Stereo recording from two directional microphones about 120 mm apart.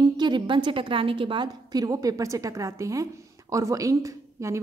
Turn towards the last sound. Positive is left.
turn(degrees=-25)  # may be behind; listen again after turning